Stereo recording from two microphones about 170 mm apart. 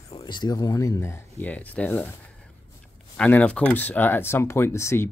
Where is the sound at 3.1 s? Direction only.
10° left (ahead or behind).